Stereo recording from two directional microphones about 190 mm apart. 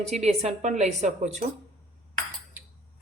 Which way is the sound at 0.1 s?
35° right (ahead or behind).